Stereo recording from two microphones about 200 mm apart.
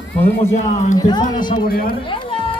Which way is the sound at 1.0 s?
20° left (ahead or behind).